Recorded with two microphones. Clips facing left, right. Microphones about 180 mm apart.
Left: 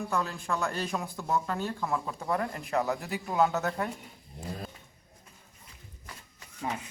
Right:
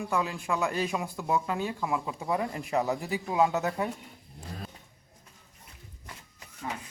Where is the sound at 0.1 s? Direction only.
10° right (ahead or behind).